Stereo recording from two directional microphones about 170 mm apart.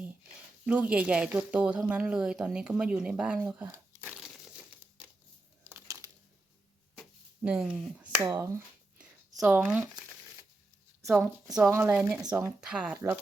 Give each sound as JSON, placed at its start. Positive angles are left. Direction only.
{"t": 0.6, "sound": "speech", "side_deg": -5}
{"t": 5.6, "sound": "crumpling", "side_deg": -15}
{"t": 7.0, "sound": "a sound", "side_deg": -5}
{"t": 9.3, "sound": "speech", "side_deg": -5}
{"t": 11.5, "sound": "speech", "side_deg": -10}